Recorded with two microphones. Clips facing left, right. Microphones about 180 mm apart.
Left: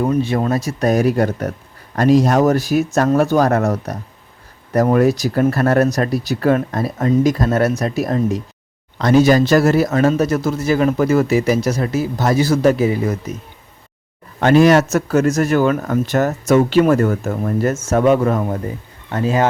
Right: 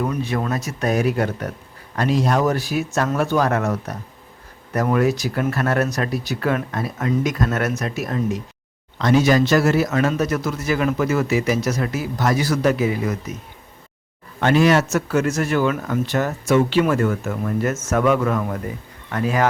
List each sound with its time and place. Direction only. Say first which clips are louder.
0.0 s speech: left 6 dB; 30° left (ahead or behind)
14.4 s speech: left 5 dB; 40° left (ahead or behind); by 19.5 s 25° left (ahead or behind)